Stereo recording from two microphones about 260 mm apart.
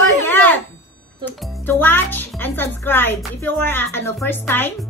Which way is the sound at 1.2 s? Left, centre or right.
Centre.